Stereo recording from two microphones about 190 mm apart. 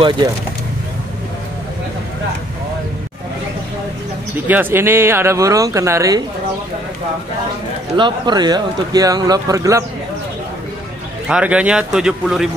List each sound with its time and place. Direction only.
4.5 s speech: 10° right (ahead or behind)
7.9 s a man's voice: 25° right (ahead or behind)
11.2 s a man's voice: 5° right (ahead or behind)